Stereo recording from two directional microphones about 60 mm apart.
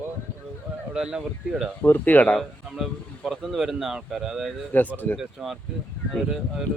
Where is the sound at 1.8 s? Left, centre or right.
Left.